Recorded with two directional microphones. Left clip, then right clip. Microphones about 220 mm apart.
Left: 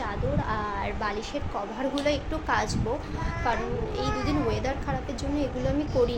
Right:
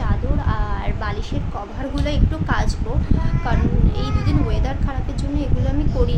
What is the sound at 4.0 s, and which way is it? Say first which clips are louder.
Speech: even; 10° right (ahead or behind).